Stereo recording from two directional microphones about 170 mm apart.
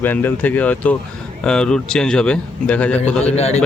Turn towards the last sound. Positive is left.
turn(degrees=40)  # may be behind; listen again after turning